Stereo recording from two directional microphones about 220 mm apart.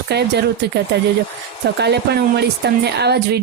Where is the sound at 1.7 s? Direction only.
50° right (ahead or behind).